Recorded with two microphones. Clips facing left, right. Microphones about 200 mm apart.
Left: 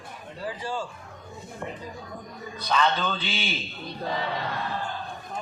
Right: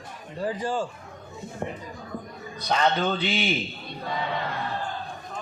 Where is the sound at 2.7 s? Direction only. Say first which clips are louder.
Right 2 dB; 40° right (ahead or behind).